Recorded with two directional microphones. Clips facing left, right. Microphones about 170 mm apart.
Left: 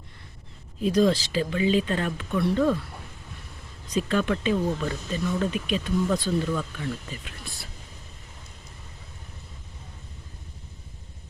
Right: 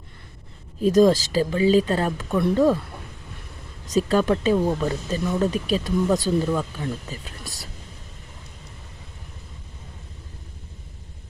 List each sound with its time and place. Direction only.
0.8 s speech: 45° right (ahead or behind)
3.8 s speech: 40° right (ahead or behind)